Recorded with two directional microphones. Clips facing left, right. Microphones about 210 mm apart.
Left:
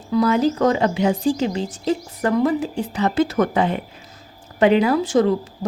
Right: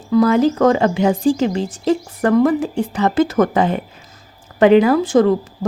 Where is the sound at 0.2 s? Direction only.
50° right (ahead or behind).